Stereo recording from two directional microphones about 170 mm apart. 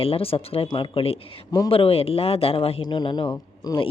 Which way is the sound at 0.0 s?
35° left (ahead or behind).